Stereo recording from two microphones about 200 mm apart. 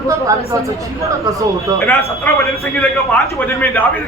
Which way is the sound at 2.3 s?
10° left (ahead or behind).